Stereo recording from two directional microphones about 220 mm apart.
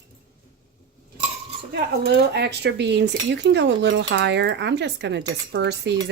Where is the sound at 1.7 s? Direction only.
50° right (ahead or behind).